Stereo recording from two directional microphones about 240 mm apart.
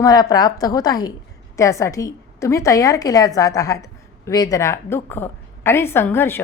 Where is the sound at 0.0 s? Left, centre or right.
Centre.